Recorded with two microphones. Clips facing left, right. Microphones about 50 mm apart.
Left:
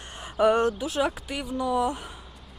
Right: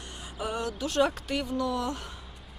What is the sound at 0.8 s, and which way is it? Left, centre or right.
A woman's voice, centre.